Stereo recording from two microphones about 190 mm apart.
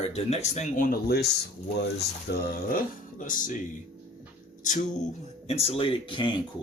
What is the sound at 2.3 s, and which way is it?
Speech, 55° left (ahead or behind).